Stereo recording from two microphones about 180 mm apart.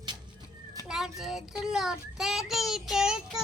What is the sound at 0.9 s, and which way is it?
A child's voice, centre (ahead or behind).